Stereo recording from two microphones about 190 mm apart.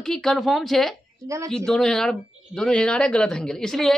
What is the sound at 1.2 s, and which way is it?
Speech, 15° right (ahead or behind).